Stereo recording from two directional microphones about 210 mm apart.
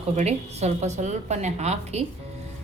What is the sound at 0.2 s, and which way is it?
A woman's voice, 30° right (ahead or behind).